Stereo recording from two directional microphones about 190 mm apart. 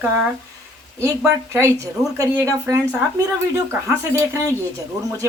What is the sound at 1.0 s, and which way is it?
Speech, 15° right (ahead or behind).